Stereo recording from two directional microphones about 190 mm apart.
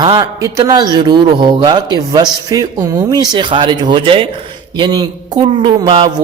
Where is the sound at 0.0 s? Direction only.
20° right (ahead or behind).